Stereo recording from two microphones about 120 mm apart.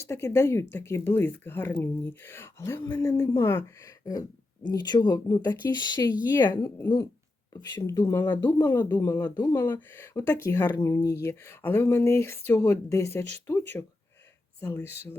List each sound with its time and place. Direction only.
0.0 s speech: 20° left (ahead or behind)
7.8 s speech: 25° left (ahead or behind)